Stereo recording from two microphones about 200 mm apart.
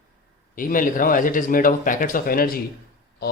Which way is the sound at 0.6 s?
45° left (ahead or behind).